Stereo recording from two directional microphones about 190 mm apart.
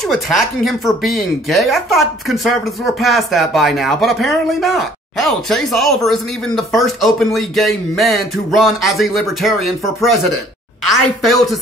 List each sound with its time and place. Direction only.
0.1 s speech: centre (ahead or behind)